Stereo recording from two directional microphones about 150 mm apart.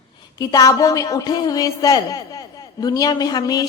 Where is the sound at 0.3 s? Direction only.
25° left (ahead or behind).